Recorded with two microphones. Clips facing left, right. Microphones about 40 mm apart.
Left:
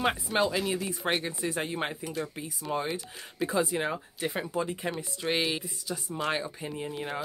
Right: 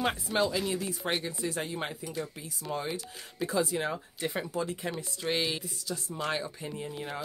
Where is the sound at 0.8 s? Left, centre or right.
Left.